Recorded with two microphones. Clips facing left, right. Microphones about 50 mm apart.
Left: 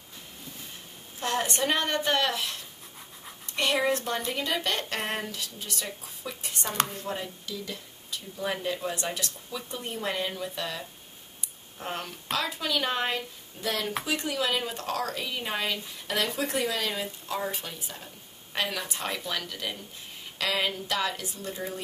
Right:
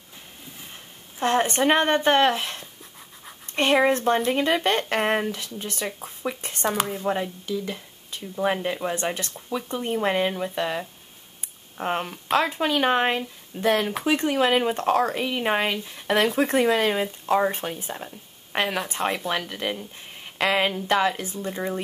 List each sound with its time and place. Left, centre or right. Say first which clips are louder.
1.2 s speech: right 7 dB; right
6.8 s a woman's voice: right 3 dB; centre
7.1 s speech: right 9 dB; right